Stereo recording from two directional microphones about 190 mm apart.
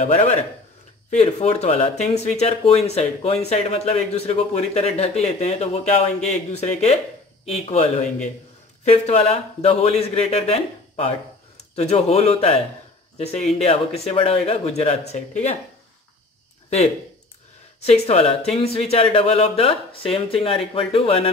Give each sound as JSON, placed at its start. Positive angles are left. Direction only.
{"t": 1.1, "sound": "speech", "side_deg": 35}
{"t": 17.8, "sound": "speech", "side_deg": 35}